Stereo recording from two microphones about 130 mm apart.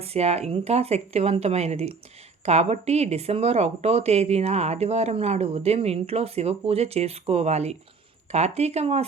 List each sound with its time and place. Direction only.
0.0 s speech: 55° right (ahead or behind)